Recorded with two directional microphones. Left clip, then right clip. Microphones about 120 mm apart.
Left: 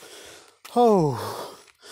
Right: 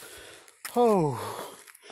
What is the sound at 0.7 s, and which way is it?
Speech, 80° left.